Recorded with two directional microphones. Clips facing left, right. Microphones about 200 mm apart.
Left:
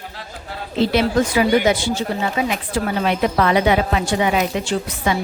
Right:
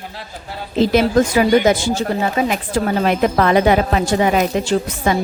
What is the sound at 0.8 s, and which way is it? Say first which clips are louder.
A woman's voice: right 3 dB; 45° right (ahead or behind).